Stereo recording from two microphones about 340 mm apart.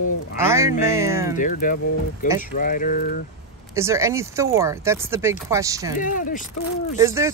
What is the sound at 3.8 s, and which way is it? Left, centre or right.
Speech, centre.